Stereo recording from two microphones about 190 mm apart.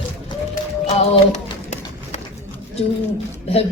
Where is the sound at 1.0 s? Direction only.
40° left (ahead or behind).